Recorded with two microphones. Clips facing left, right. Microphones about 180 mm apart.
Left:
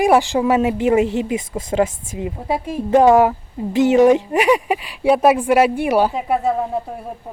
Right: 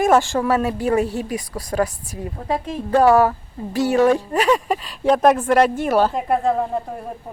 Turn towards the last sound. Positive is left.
turn(degrees=5)  # may be behind; listen again after turning